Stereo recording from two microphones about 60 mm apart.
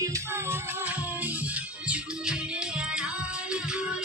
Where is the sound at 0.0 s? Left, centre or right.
Right.